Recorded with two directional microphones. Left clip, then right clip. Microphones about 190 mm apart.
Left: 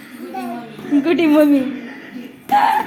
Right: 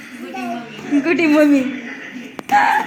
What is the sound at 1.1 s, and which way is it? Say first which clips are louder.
A woman's voice: even; 15° left (ahead or behind).